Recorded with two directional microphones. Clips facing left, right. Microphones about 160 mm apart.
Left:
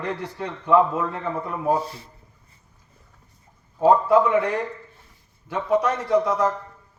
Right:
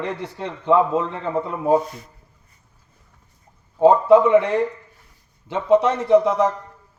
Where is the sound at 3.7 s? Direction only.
25° right (ahead or behind).